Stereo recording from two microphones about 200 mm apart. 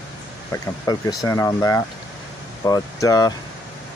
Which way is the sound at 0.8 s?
20° left (ahead or behind).